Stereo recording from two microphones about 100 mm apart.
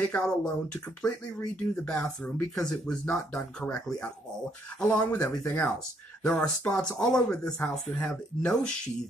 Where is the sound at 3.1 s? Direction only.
20° left (ahead or behind).